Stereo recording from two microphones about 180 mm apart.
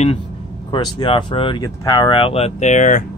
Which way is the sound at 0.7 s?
25° left (ahead or behind).